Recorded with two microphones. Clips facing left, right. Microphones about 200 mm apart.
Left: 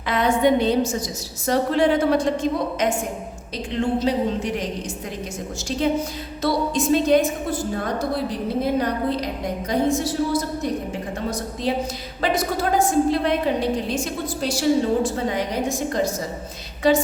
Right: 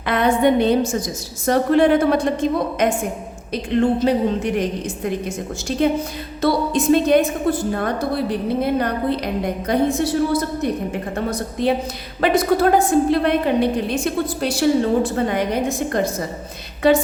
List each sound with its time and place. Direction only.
0.0 s a woman's voice: 55° right (ahead or behind)
6.4 s a woman's voice: 60° right (ahead or behind)
11.7 s a woman's voice: 60° right (ahead or behind)